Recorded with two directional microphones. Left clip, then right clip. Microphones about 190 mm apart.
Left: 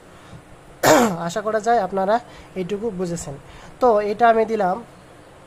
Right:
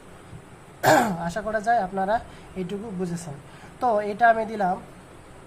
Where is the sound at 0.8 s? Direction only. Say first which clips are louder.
Left 4 dB; 40° left (ahead or behind).